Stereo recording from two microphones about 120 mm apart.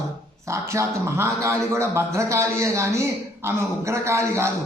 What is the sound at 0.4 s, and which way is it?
A man's voice, 25° right (ahead or behind).